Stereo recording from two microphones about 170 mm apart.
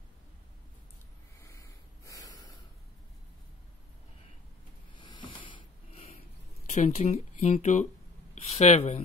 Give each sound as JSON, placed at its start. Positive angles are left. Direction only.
{"t": 1.4, "sound": "snort", "side_deg": 20}
{"t": 4.9, "sound": "a sound", "side_deg": 30}
{"t": 6.7, "sound": "speech", "side_deg": 40}